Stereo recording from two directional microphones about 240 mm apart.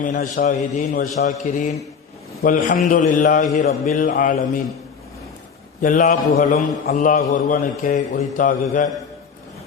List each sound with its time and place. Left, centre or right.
0.0 s a man's voice: left
5.8 s a man's voice: left